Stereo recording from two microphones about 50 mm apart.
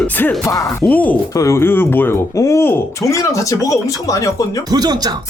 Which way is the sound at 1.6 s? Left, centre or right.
Left.